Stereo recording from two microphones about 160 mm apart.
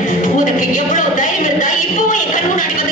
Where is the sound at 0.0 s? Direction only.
55° left (ahead or behind).